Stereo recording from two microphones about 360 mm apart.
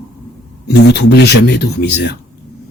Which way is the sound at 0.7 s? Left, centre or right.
Left.